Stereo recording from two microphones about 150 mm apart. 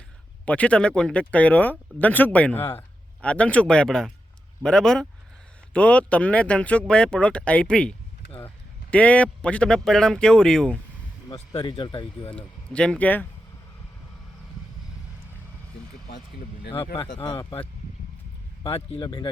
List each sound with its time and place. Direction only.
0.4 s speech: 10° left (ahead or behind)
11.6 s speech: 30° left (ahead or behind)
12.4 s speech: 5° left (ahead or behind)
16.7 s speech: 35° left (ahead or behind)
18.6 s speech: 40° left (ahead or behind)
18.9 s speech: 30° left (ahead or behind)